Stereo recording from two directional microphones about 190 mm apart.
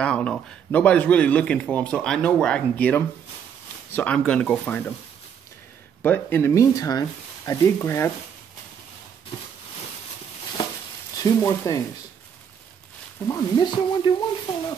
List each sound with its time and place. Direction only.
0.0 s a man's voice: 5° left (ahead or behind)
6.0 s speech: 10° left (ahead or behind)
11.1 s speech: 20° left (ahead or behind)
13.3 s speech: 25° left (ahead or behind)